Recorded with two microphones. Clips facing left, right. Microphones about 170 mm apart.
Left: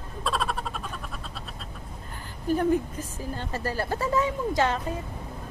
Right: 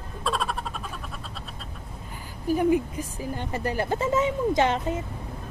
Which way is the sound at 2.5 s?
10° right (ahead or behind).